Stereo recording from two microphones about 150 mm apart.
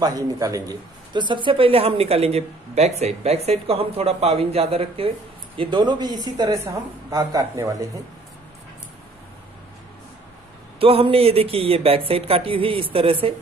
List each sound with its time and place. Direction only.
0.0 s a man's voice: 25° right (ahead or behind)
10.8 s a man's voice: 40° right (ahead or behind)